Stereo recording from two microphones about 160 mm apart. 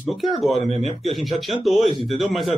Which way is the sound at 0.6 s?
40° right (ahead or behind).